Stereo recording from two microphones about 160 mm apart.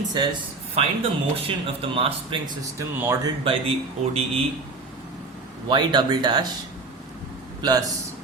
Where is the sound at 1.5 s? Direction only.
35° right (ahead or behind).